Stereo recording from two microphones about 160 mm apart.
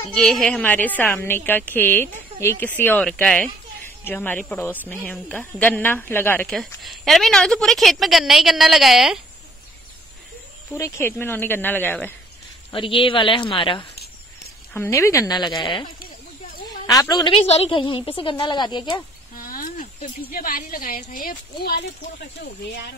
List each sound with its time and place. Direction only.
0.1 s a woman's voice: 5° left (ahead or behind)
6.4 s a woman's voice: centre (ahead or behind)
10.7 s a woman's voice: 15° left (ahead or behind)
12.7 s a woman's voice: 35° left (ahead or behind)
14.7 s a woman's voice: 15° left (ahead or behind)
17.5 s a woman's voice: 35° left (ahead or behind)
19.3 s a sound: 65° left (ahead or behind)
20.2 s a woman's voice: 65° left (ahead or behind)
22.4 s speech: 90° left